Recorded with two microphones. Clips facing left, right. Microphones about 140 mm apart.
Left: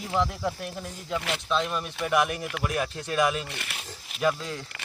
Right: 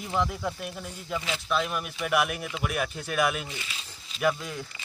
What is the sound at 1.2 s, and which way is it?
Speech, 65° left (ahead or behind).